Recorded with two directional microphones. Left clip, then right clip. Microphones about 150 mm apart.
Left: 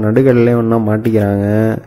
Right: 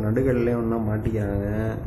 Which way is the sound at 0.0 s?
40° left (ahead or behind).